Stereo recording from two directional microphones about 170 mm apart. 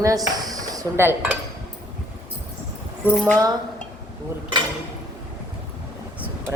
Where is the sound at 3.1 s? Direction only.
5° left (ahead or behind).